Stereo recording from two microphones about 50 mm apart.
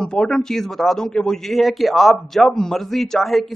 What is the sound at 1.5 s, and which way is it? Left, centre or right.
A man's voice, centre.